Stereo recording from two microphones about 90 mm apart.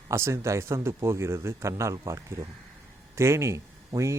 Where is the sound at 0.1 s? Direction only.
30° right (ahead or behind).